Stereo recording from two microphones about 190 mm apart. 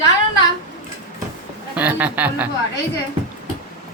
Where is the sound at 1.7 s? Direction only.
10° right (ahead or behind).